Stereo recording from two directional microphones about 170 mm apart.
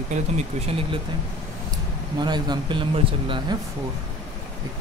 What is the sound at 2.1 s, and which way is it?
Speech, 25° right (ahead or behind).